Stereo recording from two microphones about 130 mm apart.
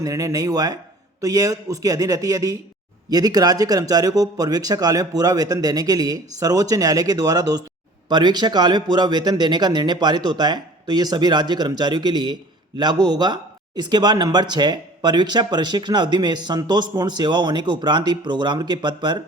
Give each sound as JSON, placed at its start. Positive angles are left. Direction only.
{"t": 0.0, "sound": "a man's voice", "side_deg": -25}